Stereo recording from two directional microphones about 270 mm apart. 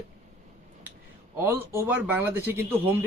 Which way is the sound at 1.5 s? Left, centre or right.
Centre.